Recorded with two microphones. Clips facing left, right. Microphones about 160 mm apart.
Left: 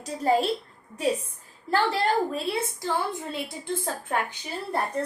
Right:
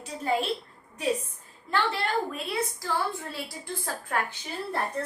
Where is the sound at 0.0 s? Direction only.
40° left (ahead or behind).